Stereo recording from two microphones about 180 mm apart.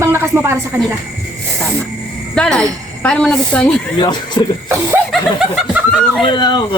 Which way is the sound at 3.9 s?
25° left (ahead or behind).